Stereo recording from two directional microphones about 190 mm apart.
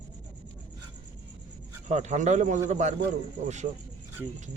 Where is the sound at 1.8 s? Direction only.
40° right (ahead or behind).